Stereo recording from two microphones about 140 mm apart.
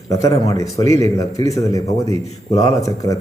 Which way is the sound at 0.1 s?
25° left (ahead or behind).